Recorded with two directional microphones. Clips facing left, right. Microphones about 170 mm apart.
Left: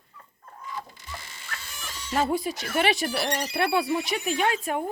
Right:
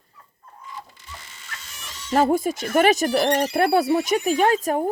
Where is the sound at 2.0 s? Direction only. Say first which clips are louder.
Right 6 dB; 45° right (ahead or behind).